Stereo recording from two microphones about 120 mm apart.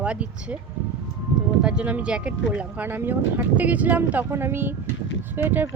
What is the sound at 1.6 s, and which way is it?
Speech, 10° right (ahead or behind).